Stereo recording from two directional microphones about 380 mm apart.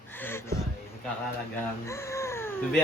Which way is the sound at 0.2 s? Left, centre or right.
Centre.